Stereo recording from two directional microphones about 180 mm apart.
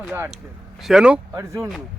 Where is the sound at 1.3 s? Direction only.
15° right (ahead or behind).